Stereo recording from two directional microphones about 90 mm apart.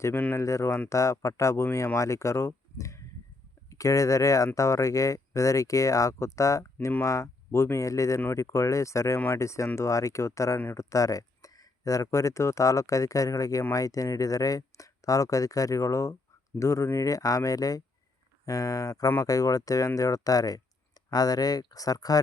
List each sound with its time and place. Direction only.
0.0 s speech: 25° left (ahead or behind)
0.3 s speech: 35° left (ahead or behind)